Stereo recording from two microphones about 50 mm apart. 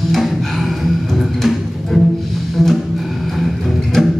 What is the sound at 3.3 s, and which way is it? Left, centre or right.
Music, centre.